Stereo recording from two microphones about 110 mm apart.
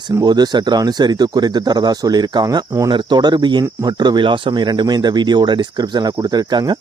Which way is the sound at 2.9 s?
45° right (ahead or behind).